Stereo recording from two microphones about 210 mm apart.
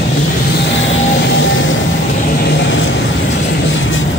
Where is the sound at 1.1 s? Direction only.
55° left (ahead or behind).